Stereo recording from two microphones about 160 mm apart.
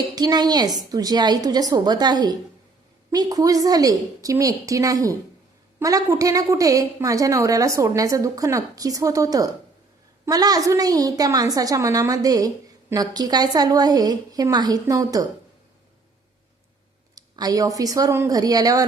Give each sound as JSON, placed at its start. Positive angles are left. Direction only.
{"t": 0.2, "sound": "a woman's voice", "side_deg": -25}
{"t": 17.2, "sound": "a woman's voice", "side_deg": -25}